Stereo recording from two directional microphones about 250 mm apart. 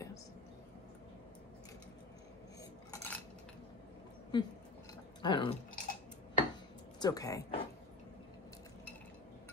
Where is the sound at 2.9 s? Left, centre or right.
Centre.